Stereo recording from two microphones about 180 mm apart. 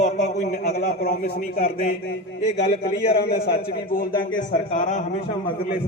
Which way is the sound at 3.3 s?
55° left (ahead or behind).